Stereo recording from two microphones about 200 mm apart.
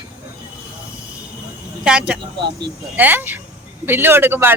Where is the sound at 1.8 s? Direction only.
5° right (ahead or behind).